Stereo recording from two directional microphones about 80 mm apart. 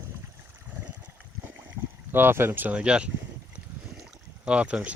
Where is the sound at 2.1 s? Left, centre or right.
Right; by 3.1 s centre.